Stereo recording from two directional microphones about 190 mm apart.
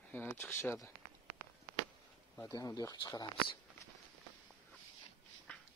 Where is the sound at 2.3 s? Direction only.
15° left (ahead or behind).